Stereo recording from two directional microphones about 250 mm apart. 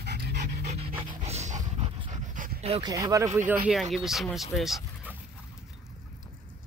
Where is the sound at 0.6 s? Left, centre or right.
Right.